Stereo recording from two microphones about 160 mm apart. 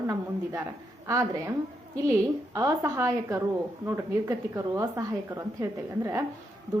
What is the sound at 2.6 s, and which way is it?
A woman's voice, 20° right (ahead or behind).